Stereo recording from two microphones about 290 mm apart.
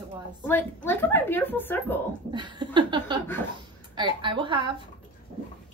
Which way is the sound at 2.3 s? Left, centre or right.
Centre.